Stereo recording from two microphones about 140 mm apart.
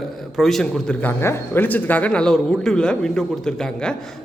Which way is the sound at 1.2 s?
15° left (ahead or behind).